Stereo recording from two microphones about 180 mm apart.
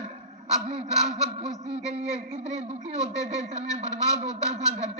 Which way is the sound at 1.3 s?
35° right (ahead or behind).